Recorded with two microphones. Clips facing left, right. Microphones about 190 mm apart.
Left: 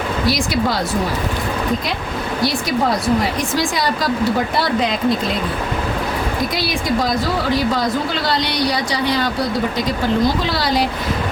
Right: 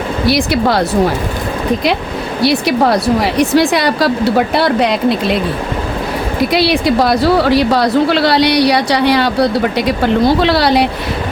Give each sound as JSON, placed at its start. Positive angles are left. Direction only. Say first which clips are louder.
{"t": 0.3, "sound": "speech", "louder": "right 7 dB", "side_deg": -65}
{"t": 2.4, "sound": "a woman's voice", "louder": "right 7 dB", "side_deg": -70}
{"t": 6.5, "sound": "a woman's voice", "louder": "right 8 dB", "side_deg": -70}